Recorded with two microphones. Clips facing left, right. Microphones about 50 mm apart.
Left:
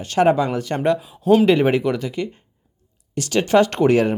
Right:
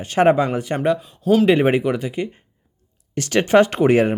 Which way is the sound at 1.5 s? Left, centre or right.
Right.